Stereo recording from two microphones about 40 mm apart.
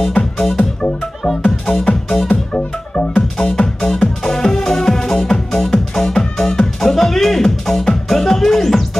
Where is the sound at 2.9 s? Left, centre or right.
Left.